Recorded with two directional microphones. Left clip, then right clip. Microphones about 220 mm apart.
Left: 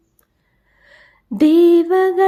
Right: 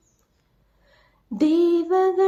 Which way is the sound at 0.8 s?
35° left (ahead or behind).